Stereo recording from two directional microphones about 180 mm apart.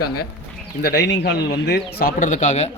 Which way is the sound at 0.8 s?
70° left (ahead or behind).